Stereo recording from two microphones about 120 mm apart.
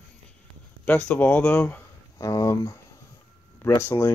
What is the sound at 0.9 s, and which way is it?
Speech, 15° left (ahead or behind).